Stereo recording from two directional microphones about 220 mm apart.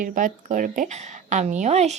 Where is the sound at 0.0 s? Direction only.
35° right (ahead or behind).